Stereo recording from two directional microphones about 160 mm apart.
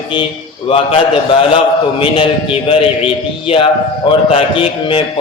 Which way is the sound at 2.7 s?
35° left (ahead or behind).